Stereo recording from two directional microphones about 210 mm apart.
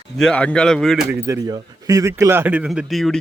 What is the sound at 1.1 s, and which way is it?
Speech, 10° right (ahead or behind).